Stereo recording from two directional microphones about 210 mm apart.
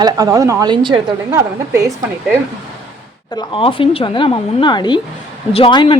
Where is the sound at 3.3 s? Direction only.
25° left (ahead or behind).